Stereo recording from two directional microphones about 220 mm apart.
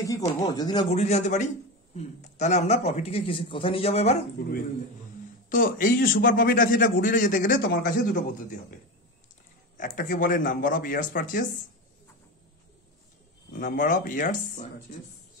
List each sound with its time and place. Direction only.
0.0 s a sound: 15° left (ahead or behind)
0.6 s speech: 20° left (ahead or behind)
5.5 s a man's voice: 40° left (ahead or behind)
9.8 s a man's voice: 40° left (ahead or behind)
13.6 s a man's voice: 35° left (ahead or behind)